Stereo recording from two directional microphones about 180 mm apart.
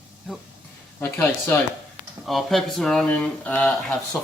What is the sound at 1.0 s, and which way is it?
Speech, 10° left (ahead or behind).